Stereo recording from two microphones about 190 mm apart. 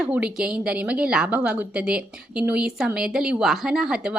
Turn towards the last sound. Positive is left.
turn(degrees=-5)  # may be behind; listen again after turning